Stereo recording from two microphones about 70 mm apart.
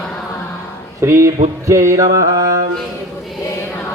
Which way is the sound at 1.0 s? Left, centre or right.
Right.